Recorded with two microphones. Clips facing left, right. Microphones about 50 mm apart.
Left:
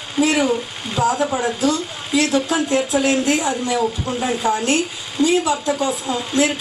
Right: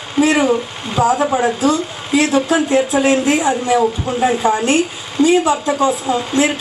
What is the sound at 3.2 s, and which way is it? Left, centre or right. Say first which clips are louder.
Speech: right 4 dB; centre.